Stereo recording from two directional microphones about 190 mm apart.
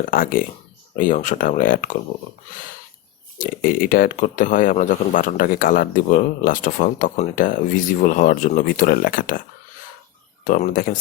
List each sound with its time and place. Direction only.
0.1 s speech: 50° left (ahead or behind)
3.3 s speech: 45° left (ahead or behind)
10.4 s speech: 45° left (ahead or behind)